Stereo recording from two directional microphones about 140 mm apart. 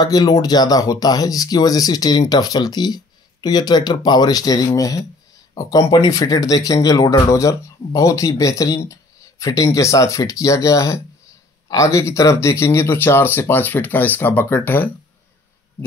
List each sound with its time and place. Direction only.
0.0 s speech: 25° left (ahead or behind)